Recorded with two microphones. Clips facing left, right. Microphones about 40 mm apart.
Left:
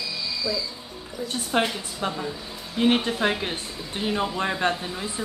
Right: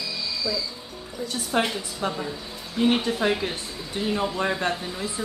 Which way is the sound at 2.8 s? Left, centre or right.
Centre.